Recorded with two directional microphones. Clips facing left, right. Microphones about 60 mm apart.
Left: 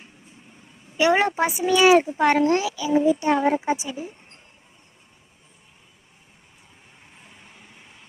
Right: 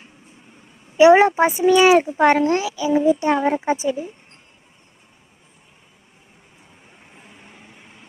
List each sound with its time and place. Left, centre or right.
0.9 s speech: right
7.0 s vehicle: right